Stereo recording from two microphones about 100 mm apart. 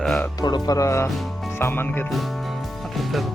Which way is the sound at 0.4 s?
40° left (ahead or behind).